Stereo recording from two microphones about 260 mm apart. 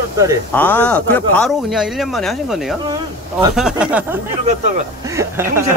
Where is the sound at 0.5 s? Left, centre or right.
Centre.